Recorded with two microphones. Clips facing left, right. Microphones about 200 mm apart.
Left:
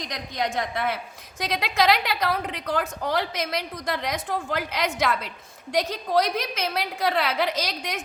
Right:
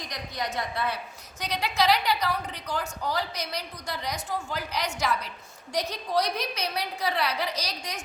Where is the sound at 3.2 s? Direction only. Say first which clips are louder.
Left 5 dB; 90° left.